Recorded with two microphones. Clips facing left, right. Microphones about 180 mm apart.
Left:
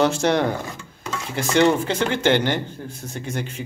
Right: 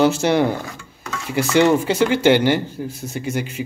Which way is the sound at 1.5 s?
10° right (ahead or behind).